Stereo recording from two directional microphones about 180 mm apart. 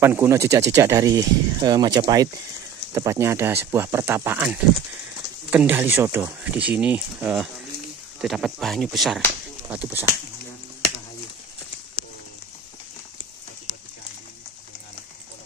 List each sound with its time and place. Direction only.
0.0 s speech: 10° right (ahead or behind)